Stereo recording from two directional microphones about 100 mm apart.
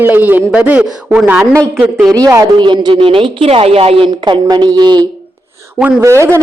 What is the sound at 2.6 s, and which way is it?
Speech, 50° right (ahead or behind).